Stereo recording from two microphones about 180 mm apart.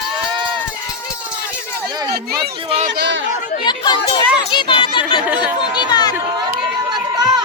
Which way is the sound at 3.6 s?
25° left (ahead or behind).